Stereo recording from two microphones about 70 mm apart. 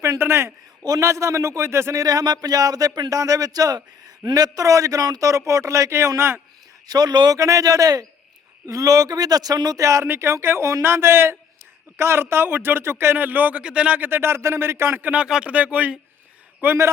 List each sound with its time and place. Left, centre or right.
0.2 s a man's voice: right
2.0 s speech: right
5.3 s a man's voice: right
6.8 s speech: right
7.3 s speech: right
13.1 s speech: right
15.1 s speech: centre